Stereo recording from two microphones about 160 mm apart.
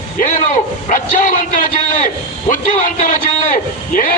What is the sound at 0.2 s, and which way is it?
Bow-wow, 50° left (ahead or behind).